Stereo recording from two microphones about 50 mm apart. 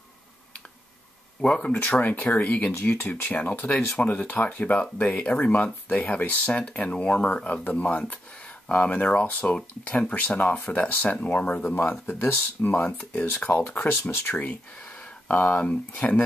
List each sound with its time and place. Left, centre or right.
1.4 s speech: left
1.7 s speech: left
11.6 s speech: left